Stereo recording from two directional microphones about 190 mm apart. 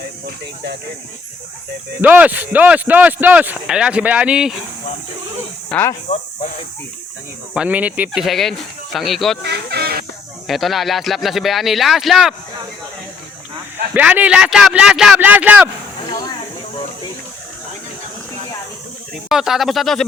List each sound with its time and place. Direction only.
0.3 s speech: 60° right (ahead or behind)
2.0 s speech: 10° right (ahead or behind)
5.6 s speech: 10° left (ahead or behind)
6.1 s speech: 35° left (ahead or behind)
7.5 s speech: 5° right (ahead or behind)
9.4 s fowl: 60° right (ahead or behind)
10.4 s speech: centre (ahead or behind)
13.9 s speech: 10° right (ahead or behind)
19.3 s speech: centre (ahead or behind)